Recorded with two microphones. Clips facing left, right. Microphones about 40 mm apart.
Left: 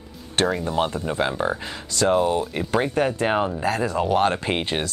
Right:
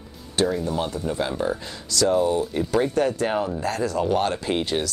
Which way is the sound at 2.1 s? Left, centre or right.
Left.